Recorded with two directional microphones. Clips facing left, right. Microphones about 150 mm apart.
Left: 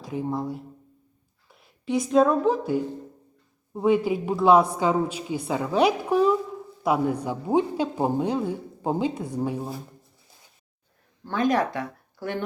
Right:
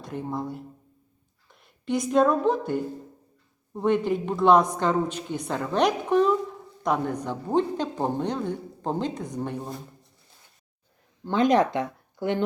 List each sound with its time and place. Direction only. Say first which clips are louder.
0.0 s a woman's voice: left 3 dB; centre (ahead or behind)
11.3 s speech: right 3 dB; 20° right (ahead or behind)